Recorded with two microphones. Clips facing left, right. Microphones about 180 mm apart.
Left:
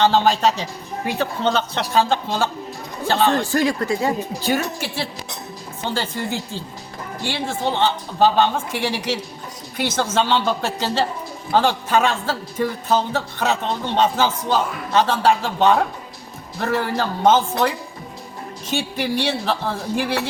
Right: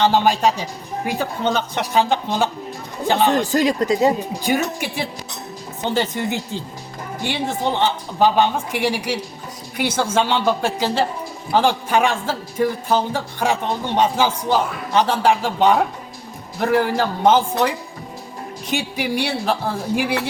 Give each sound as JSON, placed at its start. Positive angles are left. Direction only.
{"t": 0.0, "sound": "speech", "side_deg": -15}
{"t": 18.7, "sound": "speech", "side_deg": -15}